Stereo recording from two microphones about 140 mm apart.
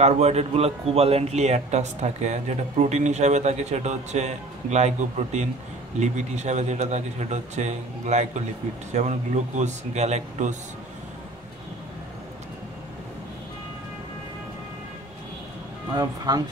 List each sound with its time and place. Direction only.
0.0 s a man's voice: 50° right (ahead or behind)
15.9 s speech: 30° right (ahead or behind)